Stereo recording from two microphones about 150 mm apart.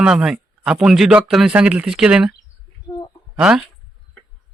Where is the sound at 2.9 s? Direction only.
30° left (ahead or behind).